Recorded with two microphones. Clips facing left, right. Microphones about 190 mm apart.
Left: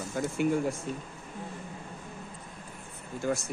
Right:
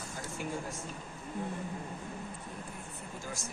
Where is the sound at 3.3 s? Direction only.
60° left (ahead or behind).